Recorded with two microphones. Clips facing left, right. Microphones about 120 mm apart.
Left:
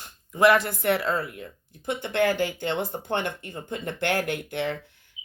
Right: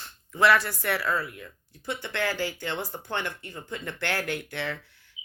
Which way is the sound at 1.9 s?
20° left (ahead or behind).